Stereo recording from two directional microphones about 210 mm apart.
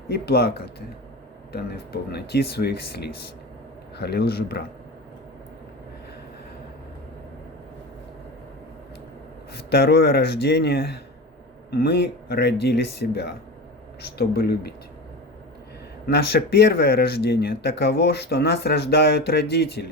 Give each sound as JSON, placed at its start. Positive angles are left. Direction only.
{"t": 0.1, "sound": "speech", "side_deg": 50}
{"t": 9.5, "sound": "speech", "side_deg": 50}
{"t": 16.0, "sound": "speech", "side_deg": 50}